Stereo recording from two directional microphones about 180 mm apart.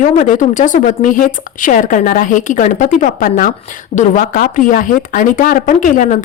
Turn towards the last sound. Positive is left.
turn(degrees=45)  # may be behind; listen again after turning